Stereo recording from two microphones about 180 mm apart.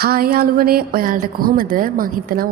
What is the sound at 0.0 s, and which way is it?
A woman's voice, 55° right (ahead or behind).